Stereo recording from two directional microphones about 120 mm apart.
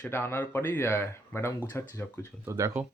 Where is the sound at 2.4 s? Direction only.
25° right (ahead or behind).